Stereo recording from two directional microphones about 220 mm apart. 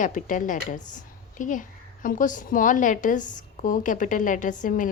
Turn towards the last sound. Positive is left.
turn(degrees=35)  # may be behind; listen again after turning